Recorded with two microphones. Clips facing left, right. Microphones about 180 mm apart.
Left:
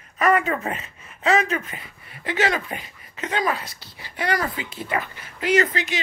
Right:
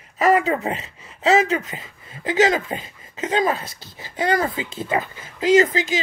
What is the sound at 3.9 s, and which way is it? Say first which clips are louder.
Speech: right 4 dB; 25° right (ahead or behind).